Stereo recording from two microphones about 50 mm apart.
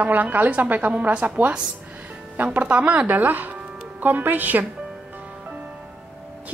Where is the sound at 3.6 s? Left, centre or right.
Centre.